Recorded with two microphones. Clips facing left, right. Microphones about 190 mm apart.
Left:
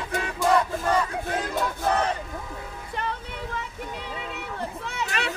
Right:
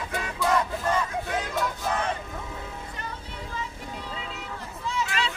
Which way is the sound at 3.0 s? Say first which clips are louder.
Left 6 dB; 65° left (ahead or behind).